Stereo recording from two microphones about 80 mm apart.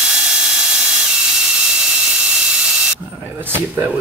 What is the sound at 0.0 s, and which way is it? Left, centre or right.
Ratchet, centre.